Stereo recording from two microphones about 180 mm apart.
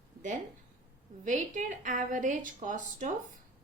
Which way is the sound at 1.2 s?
45° right (ahead or behind).